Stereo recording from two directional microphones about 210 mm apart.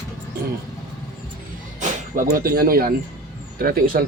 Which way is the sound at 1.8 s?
45° right (ahead or behind).